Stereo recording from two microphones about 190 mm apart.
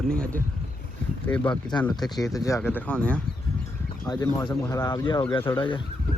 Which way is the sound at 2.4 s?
15° left (ahead or behind).